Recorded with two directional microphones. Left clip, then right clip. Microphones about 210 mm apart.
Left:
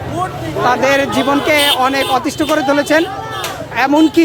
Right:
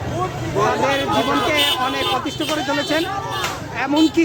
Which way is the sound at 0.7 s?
30° left (ahead or behind).